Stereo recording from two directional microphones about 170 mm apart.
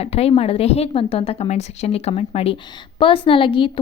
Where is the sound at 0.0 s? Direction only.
35° left (ahead or behind).